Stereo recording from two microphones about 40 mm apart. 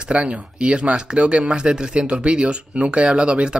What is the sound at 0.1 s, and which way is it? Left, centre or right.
Speech, right.